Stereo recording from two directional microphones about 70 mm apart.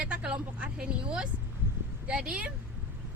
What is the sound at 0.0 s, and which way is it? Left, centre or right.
Speech, centre.